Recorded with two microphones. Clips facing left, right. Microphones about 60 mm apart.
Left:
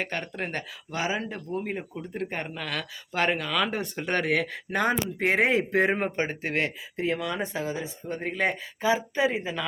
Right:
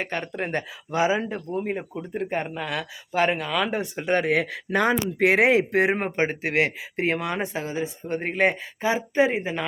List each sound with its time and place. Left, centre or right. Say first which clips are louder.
0.0 s speech: right 3 dB; centre
4.7 s speech: right 4 dB; right
6.0 s a woman's voice: right 3 dB; right
6.4 s a woman's voice: right 5 dB; right